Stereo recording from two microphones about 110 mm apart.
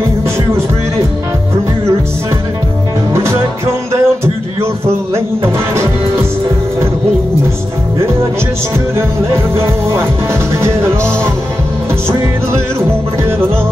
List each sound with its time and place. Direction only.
3.1 s music: 25° right (ahead or behind)
8.9 s music: 25° right (ahead or behind)